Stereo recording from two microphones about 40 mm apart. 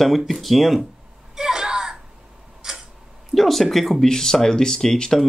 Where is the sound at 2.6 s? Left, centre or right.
Centre.